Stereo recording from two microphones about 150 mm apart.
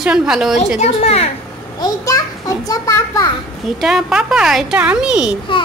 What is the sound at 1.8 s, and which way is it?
A child's voice, 25° left (ahead or behind).